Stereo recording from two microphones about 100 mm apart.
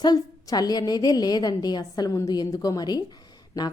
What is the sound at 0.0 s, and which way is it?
A woman's voice, 40° left (ahead or behind).